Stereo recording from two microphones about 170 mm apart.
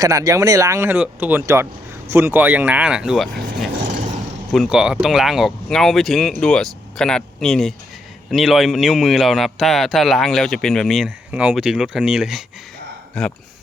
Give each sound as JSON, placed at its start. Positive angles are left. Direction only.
{"t": 0.0, "sound": "speech", "side_deg": -20}
{"t": 4.5, "sound": "speech", "side_deg": 0}